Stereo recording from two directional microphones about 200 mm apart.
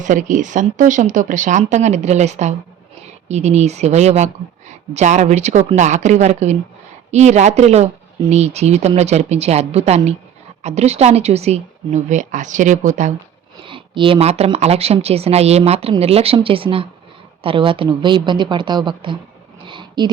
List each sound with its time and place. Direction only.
0.0 s a woman's voice: 40° right (ahead or behind)
13.7 s a woman's voice: 25° right (ahead or behind)
19.6 s a sound: 25° right (ahead or behind)